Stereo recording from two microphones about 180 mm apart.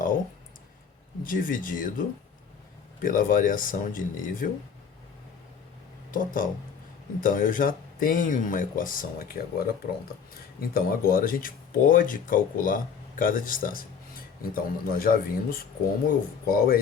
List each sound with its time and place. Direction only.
1.2 s speech: 50° left (ahead or behind)
6.1 s speech: 50° left (ahead or behind)